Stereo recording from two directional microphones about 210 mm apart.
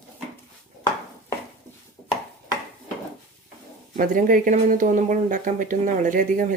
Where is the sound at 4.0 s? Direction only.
40° right (ahead or behind).